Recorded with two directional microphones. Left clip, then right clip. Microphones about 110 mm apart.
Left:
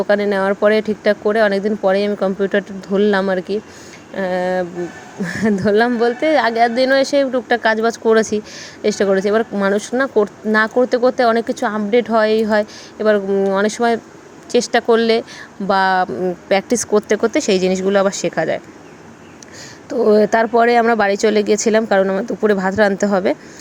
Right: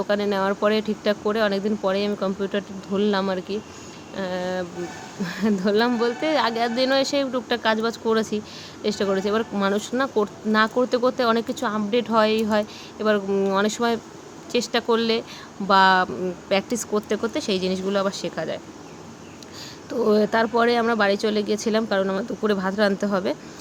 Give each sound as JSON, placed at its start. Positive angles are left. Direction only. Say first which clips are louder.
{"t": 0.0, "sound": "speech", "louder": "left 7 dB", "side_deg": 45}
{"t": 19.9, "sound": "speech", "louder": "left 7 dB", "side_deg": 40}